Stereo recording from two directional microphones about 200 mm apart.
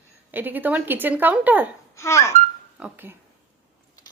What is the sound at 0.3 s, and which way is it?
A woman's voice, 10° right (ahead or behind).